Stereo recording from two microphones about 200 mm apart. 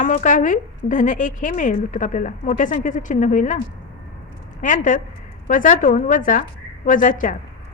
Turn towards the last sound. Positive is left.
turn(degrees=40)  # may be behind; listen again after turning